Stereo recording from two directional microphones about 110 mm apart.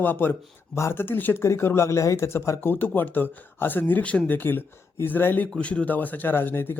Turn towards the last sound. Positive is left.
turn(degrees=20)  # may be behind; listen again after turning